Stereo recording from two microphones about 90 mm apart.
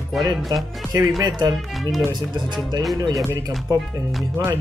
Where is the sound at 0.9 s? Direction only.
45° right (ahead or behind).